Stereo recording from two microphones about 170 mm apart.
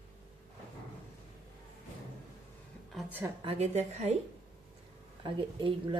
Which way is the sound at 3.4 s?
40° right (ahead or behind).